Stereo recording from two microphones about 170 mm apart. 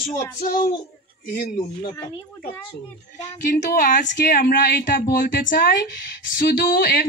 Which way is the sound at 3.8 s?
50° left (ahead or behind).